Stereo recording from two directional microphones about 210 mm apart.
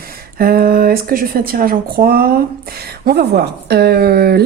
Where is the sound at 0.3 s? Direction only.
45° right (ahead or behind).